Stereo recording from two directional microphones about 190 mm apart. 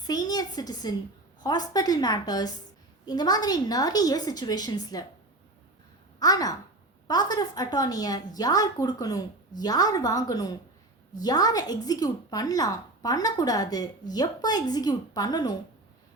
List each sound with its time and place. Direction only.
0.0 s a woman's voice: 20° left (ahead or behind)
6.1 s a woman's voice: 20° left (ahead or behind)